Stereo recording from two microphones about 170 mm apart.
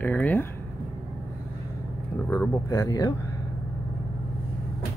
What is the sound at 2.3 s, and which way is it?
Speech, 15° left (ahead or behind).